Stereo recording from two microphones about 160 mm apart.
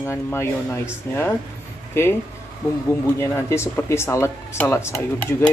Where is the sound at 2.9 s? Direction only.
15° left (ahead or behind).